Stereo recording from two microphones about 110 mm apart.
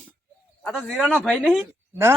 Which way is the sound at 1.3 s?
5° left (ahead or behind).